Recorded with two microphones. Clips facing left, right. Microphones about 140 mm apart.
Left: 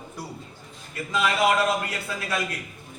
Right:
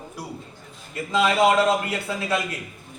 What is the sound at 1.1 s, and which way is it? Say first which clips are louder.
A man's voice: right 4 dB; 25° right (ahead or behind).